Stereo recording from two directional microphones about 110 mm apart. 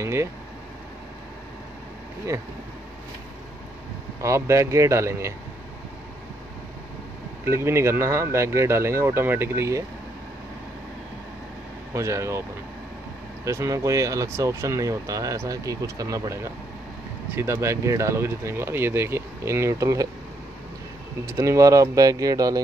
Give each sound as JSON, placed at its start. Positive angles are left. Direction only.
{"t": 0.0, "sound": "speech", "side_deg": -25}
{"t": 4.2, "sound": "speech", "side_deg": -25}
{"t": 7.4, "sound": "speech", "side_deg": -25}
{"t": 11.9, "sound": "speech", "side_deg": -25}
{"t": 13.5, "sound": "speech", "side_deg": -25}
{"t": 21.3, "sound": "speech", "side_deg": -30}